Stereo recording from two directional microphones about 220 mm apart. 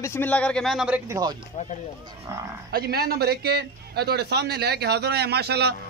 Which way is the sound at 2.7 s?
45° right (ahead or behind).